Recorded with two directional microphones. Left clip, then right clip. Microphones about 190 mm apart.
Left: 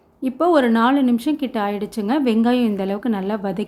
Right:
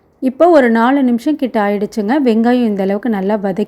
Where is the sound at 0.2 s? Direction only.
25° right (ahead or behind).